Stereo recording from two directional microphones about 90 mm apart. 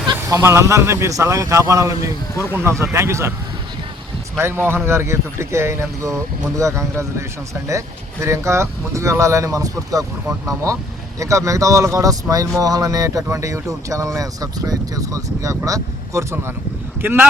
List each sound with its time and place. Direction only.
0.4 s speech: 35° right (ahead or behind)
4.4 s speech: 30° right (ahead or behind)
17.0 s speech: 25° right (ahead or behind)